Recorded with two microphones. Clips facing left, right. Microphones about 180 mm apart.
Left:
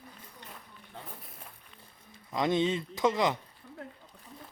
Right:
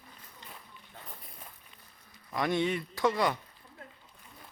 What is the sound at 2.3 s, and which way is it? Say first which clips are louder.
Speech: left 2 dB; 20° left (ahead or behind).